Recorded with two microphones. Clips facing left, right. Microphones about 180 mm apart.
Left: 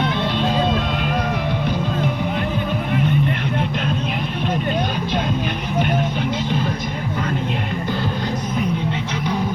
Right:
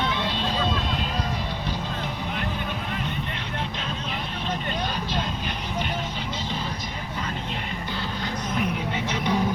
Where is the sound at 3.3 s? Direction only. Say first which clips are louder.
Left 9 dB; 55° left (ahead or behind).